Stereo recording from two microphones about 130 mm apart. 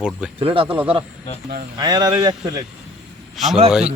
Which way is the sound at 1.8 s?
30° right (ahead or behind).